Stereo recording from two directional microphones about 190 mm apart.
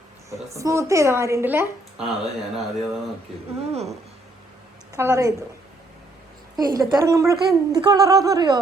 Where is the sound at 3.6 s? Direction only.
35° right (ahead or behind).